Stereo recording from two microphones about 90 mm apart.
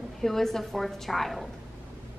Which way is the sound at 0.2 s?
5° left (ahead or behind).